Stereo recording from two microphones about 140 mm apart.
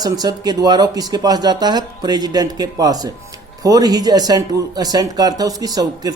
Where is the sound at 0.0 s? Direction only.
30° right (ahead or behind).